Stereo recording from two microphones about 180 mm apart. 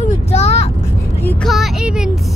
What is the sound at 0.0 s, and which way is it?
Vehicle, 40° left (ahead or behind).